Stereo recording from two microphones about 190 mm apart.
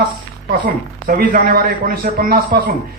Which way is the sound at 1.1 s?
50° right (ahead or behind).